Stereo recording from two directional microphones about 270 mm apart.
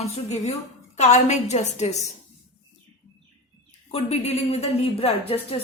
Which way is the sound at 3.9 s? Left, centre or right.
Left.